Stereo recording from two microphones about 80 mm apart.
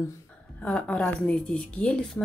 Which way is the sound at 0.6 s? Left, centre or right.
Centre.